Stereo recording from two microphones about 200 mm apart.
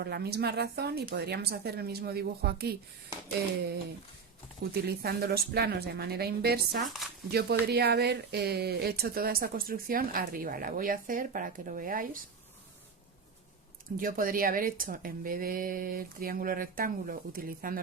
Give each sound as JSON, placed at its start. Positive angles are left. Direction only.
{"t": 0.0, "sound": "speech", "side_deg": -50}
{"t": 4.7, "sound": "speech", "side_deg": -50}
{"t": 13.9, "sound": "speech", "side_deg": -45}